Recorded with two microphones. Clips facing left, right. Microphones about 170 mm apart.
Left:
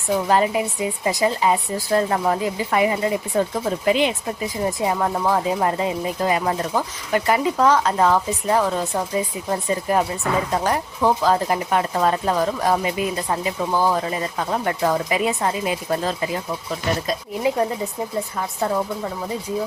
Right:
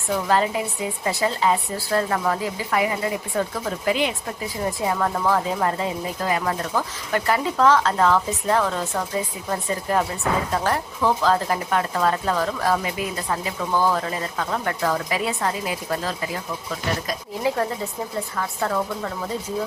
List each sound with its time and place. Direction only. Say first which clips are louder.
0.1 s speech: left 3 dB; 15° left (ahead or behind)